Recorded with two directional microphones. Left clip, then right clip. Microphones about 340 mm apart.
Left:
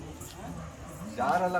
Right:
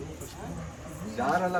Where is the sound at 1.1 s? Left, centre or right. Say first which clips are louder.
Even; centre.